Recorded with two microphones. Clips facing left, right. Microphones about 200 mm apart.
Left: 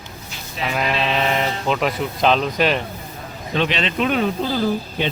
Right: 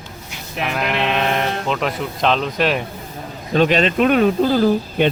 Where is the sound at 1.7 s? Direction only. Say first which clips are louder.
Left 1 dB; centre (ahead or behind).